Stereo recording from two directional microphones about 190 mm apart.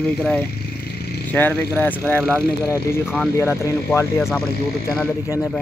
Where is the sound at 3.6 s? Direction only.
15° left (ahead or behind).